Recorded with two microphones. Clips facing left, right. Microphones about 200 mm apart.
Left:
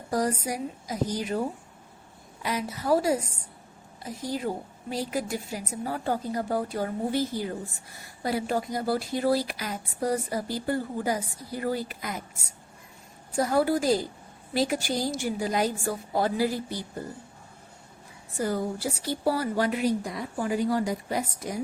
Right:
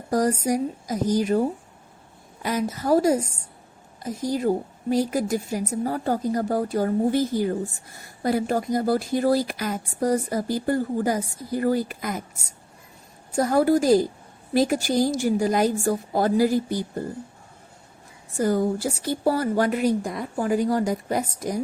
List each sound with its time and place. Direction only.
0.1 s speech: 45° right (ahead or behind)
2.4 s speech: 45° right (ahead or behind)
13.3 s speech: 45° right (ahead or behind)
18.3 s speech: 45° right (ahead or behind)